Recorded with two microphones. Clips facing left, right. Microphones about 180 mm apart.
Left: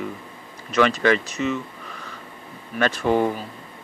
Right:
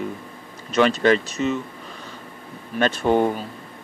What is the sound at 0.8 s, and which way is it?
Speech, 35° right (ahead or behind).